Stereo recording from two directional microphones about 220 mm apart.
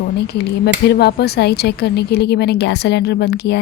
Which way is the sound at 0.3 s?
50° left (ahead or behind).